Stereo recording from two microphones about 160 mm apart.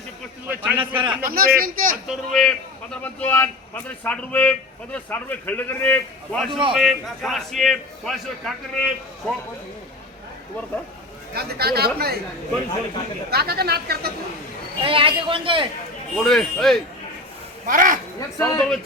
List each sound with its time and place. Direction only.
0.4 s a man's voice: 10° right (ahead or behind)
1.2 s speech: 70° right (ahead or behind)
2.0 s a man's voice: 5° left (ahead or behind)
6.5 s a man's voice: 30° right (ahead or behind)
6.7 s a man's voice: centre (ahead or behind)
11.3 s speech: 75° right (ahead or behind)
13.3 s speech: 80° right
14.8 s a man's voice: 35° right (ahead or behind)
16.1 s a man's voice: 5° left (ahead or behind)
17.7 s speech: 55° right (ahead or behind)
18.2 s speech: 20° left (ahead or behind)